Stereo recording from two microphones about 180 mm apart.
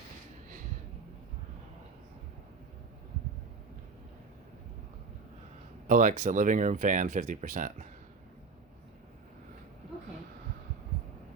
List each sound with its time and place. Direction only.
5.9 s speech: 45° right (ahead or behind)